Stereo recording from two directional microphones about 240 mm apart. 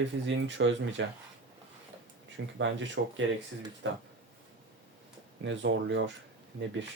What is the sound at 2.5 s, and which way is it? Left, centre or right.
Speech, right.